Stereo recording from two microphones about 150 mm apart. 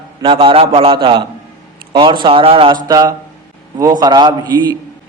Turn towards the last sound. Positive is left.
turn(degrees=-30)  # may be behind; listen again after turning